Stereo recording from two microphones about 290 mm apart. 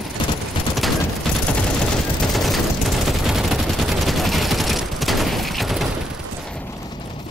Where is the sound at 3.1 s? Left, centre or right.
Centre.